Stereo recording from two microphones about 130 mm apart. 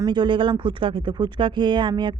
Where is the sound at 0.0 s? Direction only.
35° right (ahead or behind).